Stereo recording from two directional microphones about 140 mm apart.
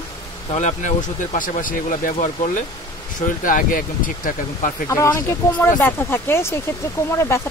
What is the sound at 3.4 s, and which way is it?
Speech, 75° left (ahead or behind).